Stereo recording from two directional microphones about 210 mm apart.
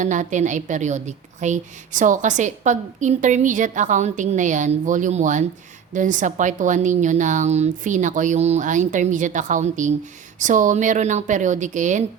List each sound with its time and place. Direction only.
0.0 s a woman's voice: 35° right (ahead or behind)